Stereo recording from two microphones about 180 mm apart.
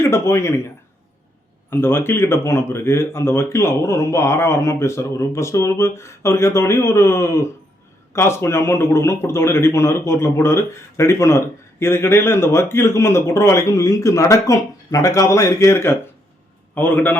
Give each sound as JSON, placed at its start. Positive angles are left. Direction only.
{"t": 0.0, "sound": "speech", "side_deg": 15}
{"t": 1.7, "sound": "speech", "side_deg": 10}